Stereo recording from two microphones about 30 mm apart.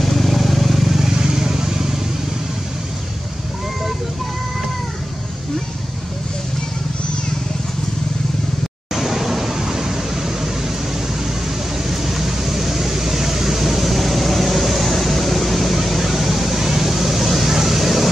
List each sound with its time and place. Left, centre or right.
0.0 s vehicle: centre
1.1 s vehicle: right
8.9 s a sound: centre
11.9 s vehicle: centre